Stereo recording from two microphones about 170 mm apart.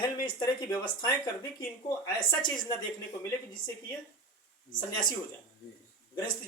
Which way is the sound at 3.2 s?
25° left (ahead or behind).